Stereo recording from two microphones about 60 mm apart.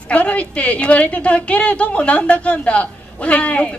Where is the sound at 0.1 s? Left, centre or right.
Left.